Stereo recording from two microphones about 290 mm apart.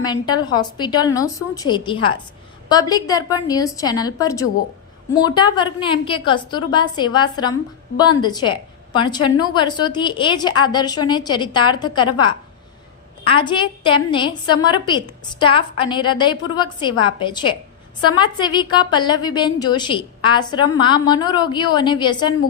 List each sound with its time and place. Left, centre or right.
0.0 s a woman's voice: centre